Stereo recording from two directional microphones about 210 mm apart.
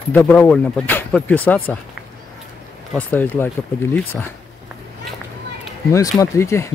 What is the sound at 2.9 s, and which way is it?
Speech, 5° left (ahead or behind).